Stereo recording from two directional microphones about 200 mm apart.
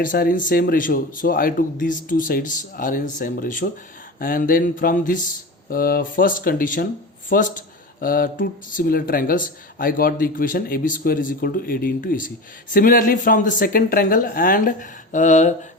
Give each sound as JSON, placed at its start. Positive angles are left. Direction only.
{"t": 0.0, "sound": "speech", "side_deg": 45}